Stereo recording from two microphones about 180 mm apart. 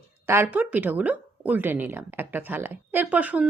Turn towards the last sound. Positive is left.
turn(degrees=-10)  # may be behind; listen again after turning